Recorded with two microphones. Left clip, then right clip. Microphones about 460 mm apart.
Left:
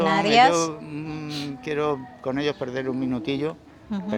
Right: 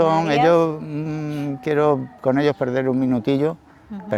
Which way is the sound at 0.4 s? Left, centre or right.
Right.